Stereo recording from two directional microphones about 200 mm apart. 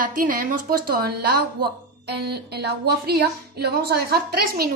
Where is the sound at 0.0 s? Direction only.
45° right (ahead or behind).